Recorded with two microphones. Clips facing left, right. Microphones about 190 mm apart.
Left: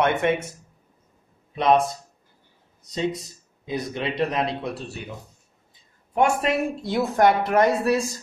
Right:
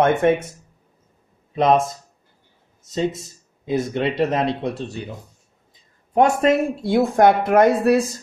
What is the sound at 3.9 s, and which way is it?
Speech, centre (ahead or behind).